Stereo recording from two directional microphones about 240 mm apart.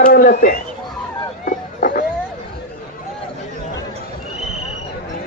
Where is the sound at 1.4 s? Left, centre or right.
Left.